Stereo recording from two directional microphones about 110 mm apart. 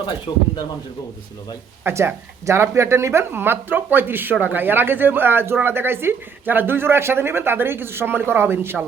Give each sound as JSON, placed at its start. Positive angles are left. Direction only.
{"t": 1.8, "sound": "speech", "side_deg": -20}